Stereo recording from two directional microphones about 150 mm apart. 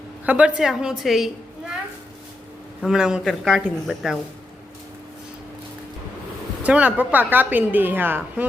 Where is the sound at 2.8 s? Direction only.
5° right (ahead or behind).